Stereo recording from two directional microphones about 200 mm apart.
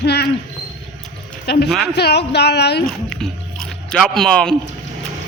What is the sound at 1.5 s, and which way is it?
Speech, 55° left (ahead or behind).